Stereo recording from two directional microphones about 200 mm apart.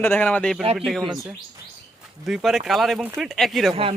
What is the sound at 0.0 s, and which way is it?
Speech, 10° left (ahead or behind).